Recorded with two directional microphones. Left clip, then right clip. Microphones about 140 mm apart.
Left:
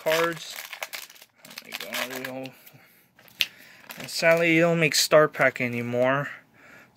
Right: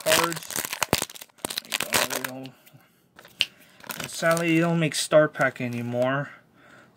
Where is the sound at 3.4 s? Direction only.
90° right.